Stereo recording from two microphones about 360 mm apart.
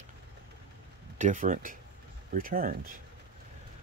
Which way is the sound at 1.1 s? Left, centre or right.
Right.